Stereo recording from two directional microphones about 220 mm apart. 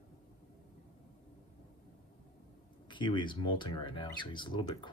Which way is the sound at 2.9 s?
20° left (ahead or behind).